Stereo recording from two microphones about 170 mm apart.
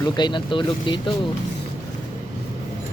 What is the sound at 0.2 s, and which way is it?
Speech, 30° left (ahead or behind).